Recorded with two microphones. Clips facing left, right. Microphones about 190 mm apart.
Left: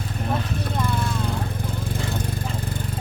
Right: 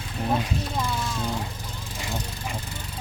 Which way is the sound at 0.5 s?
55° left (ahead or behind).